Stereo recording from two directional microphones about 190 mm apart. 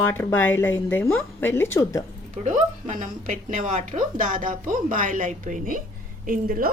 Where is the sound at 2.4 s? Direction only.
40° right (ahead or behind).